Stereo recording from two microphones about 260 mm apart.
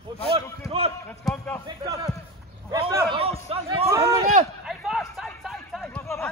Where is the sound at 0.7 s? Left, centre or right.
Right.